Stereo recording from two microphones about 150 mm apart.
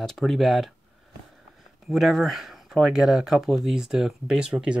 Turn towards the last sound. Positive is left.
turn(degrees=-5)  # may be behind; listen again after turning